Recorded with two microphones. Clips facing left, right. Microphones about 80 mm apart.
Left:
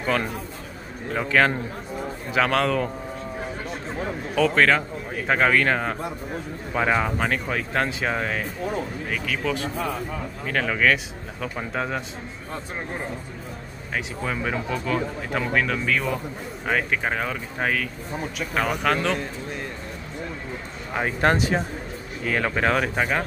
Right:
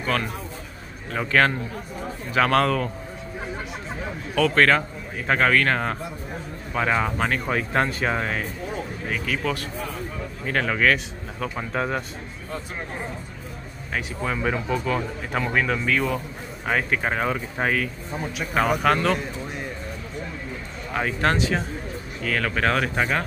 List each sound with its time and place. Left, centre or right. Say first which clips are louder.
0.0 s a man's voice: left 1 dB; centre
1.1 s speech: even; centre
4.4 s speech: even; centre
13.9 s speech: right 1 dB; centre
20.9 s speech: left 1 dB; centre